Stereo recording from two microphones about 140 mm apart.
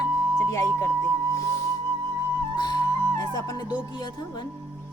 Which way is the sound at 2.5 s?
30° left (ahead or behind).